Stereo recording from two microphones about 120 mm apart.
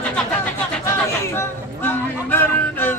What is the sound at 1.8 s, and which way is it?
Music, 15° left (ahead or behind).